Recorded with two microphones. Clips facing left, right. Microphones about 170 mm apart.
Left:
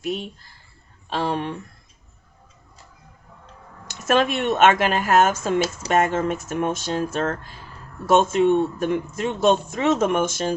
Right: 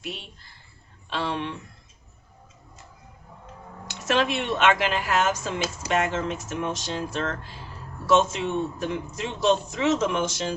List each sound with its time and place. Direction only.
0.0 s a man's voice: 45° left (ahead or behind)
4.0 s a man's voice: 50° left (ahead or behind)